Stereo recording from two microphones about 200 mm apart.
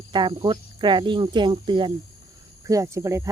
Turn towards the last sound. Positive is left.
turn(degrees=-15)  # may be behind; listen again after turning